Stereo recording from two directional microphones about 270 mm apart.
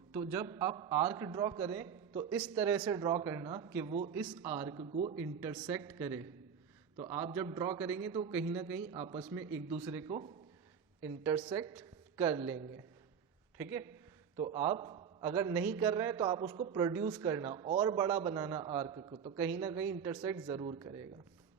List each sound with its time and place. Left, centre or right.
0.1 s speech: centre
3.8 s speech: right
4.1 s speech: centre
4.4 s speech: centre
11.2 s a woman's voice: centre
13.6 s speech: centre
14.3 s a man's voice: right